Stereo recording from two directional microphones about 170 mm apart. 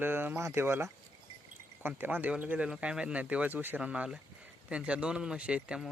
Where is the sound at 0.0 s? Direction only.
10° right (ahead or behind).